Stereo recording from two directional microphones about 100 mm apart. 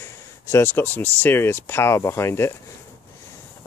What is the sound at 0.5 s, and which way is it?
Speech, 25° left (ahead or behind).